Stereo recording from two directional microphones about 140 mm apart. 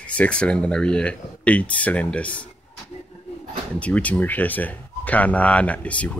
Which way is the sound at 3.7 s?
10° left (ahead or behind).